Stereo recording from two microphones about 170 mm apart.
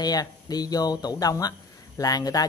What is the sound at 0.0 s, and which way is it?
Speech, 25° left (ahead or behind).